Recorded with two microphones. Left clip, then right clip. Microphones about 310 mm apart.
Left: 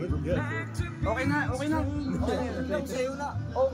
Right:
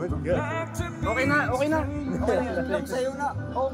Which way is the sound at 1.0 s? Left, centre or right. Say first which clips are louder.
Right 5 dB; centre.